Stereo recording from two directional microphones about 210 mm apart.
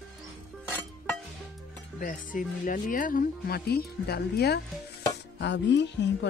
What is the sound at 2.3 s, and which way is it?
Speech, 40° left (ahead or behind).